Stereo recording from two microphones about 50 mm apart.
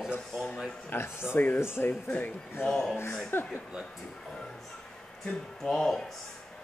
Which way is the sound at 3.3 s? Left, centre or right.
Left.